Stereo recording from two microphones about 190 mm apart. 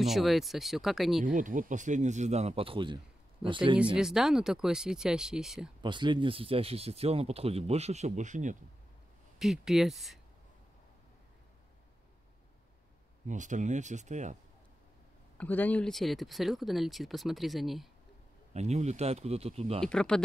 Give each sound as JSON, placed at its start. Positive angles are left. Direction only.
{"t": 0.0, "sound": "speech", "side_deg": 0}
{"t": 1.2, "sound": "speech", "side_deg": -45}
{"t": 3.7, "sound": "speech", "side_deg": -5}
{"t": 5.8, "sound": "speech", "side_deg": -25}
{"t": 9.4, "sound": "speech", "side_deg": 0}
{"t": 13.3, "sound": "speech", "side_deg": -40}
{"t": 15.3, "sound": "speech", "side_deg": 10}
{"t": 18.5, "sound": "speech", "side_deg": -35}
{"t": 19.8, "sound": "speech", "side_deg": 5}